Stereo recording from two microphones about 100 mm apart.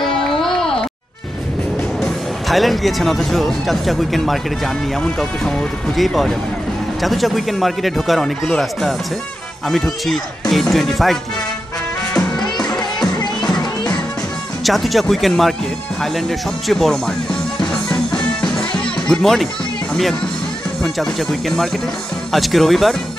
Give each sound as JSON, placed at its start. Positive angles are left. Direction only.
{"t": 0.0, "sound": "a sound", "side_deg": 5}
{"t": 2.0, "sound": "speech", "side_deg": 5}
{"t": 5.9, "sound": "speech", "side_deg": 0}
{"t": 9.7, "sound": "speech", "side_deg": 0}
{"t": 13.2, "sound": "music", "side_deg": 45}
{"t": 14.6, "sound": "speech", "side_deg": 0}
{"t": 16.0, "sound": "music", "side_deg": 0}
{"t": 19.9, "sound": "speech", "side_deg": 5}